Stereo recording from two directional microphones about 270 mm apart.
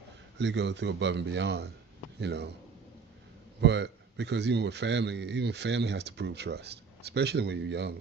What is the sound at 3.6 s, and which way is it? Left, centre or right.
A man's voice, right.